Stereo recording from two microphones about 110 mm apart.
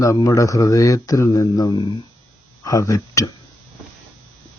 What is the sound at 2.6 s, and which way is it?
Speech, 30° left (ahead or behind).